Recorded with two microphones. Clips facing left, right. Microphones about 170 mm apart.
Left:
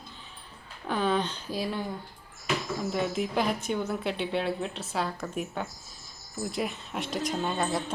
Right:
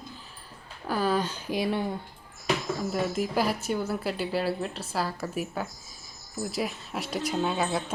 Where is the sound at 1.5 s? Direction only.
20° right (ahead or behind).